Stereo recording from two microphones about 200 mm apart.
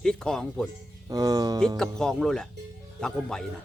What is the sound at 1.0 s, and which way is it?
Speech, 20° right (ahead or behind).